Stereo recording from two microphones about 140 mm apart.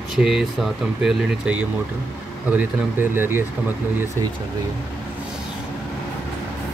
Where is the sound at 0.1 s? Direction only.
5° right (ahead or behind).